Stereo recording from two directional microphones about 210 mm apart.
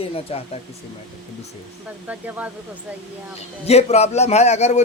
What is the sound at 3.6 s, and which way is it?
A man's voice, 30° left (ahead or behind).